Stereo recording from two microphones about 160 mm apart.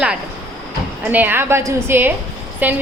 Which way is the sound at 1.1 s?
10° right (ahead or behind).